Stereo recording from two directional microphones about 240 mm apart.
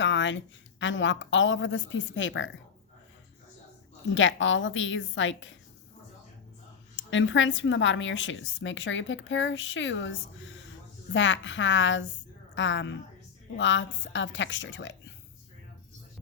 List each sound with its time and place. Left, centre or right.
0.0 s speech: left
4.1 s a woman's voice: left
6.9 s a woman's voice: left